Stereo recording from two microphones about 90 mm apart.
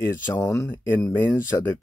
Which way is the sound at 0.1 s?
25° left (ahead or behind).